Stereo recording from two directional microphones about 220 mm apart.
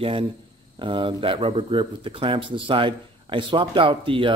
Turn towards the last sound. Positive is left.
turn(degrees=-25)  # may be behind; listen again after turning